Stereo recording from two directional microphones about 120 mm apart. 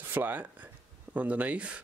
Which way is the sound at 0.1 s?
15° right (ahead or behind).